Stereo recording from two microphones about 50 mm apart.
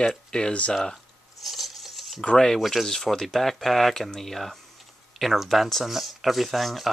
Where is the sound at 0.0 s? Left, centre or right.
Centre.